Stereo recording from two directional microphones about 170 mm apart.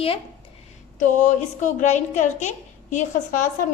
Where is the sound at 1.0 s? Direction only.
45° left (ahead or behind).